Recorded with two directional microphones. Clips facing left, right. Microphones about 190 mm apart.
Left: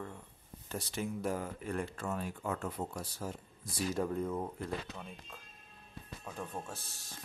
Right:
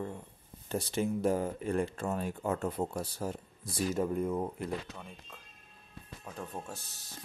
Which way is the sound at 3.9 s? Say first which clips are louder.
Right 3 dB; 10° right (ahead or behind).